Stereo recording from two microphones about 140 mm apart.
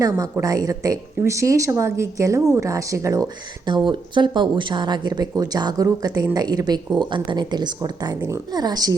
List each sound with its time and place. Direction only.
0.0 s speech: 20° right (ahead or behind)
3.8 s speech: 35° right (ahead or behind)